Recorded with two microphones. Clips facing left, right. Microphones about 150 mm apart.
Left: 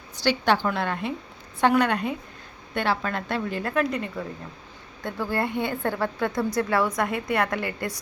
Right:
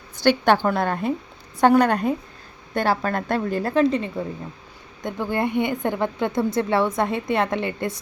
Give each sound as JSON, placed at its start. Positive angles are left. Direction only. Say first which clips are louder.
{"t": 0.2, "sound": "a woman's voice", "louder": "right 5 dB", "side_deg": -50}